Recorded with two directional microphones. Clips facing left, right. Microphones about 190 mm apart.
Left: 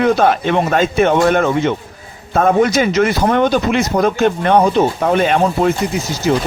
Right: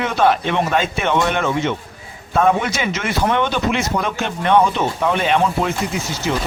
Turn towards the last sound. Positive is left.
turn(degrees=40)  # may be behind; listen again after turning